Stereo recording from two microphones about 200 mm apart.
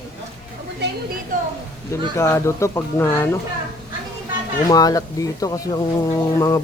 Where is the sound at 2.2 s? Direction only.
15° left (ahead or behind).